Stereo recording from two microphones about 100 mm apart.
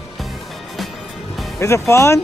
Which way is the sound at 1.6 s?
30° left (ahead or behind).